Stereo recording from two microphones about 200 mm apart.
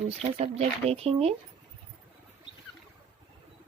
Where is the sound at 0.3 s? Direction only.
30° right (ahead or behind).